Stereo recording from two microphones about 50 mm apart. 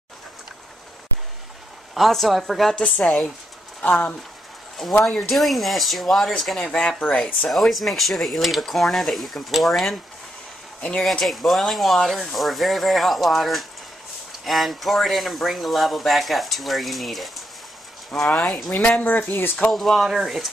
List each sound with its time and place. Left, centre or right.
2.0 s speech: centre
3.8 s speech: left
5.0 s speech: centre; by 7.2 s left
7.4 s speech: centre
11.0 s speech: centre
18.3 s speech: centre
18.9 s speech: left
19.7 s speech: centre